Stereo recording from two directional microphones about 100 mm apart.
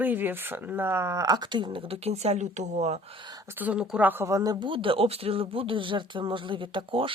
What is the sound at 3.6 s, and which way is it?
Speech, 15° right (ahead or behind).